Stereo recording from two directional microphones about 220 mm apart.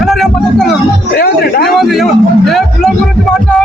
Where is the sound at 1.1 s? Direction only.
45° left (ahead or behind).